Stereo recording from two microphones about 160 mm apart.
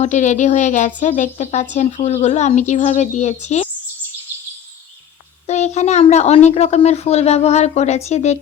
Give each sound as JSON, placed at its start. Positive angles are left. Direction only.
{"t": 0.0, "sound": "speech", "side_deg": 50}
{"t": 5.5, "sound": "speech", "side_deg": 45}